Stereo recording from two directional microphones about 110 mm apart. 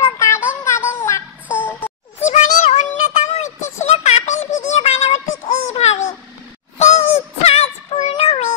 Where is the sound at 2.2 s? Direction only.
90° left.